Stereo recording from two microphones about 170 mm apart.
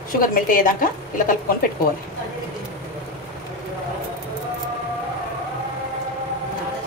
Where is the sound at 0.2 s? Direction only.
55° left (ahead or behind).